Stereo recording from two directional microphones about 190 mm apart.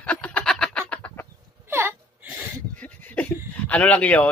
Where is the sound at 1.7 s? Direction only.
10° right (ahead or behind).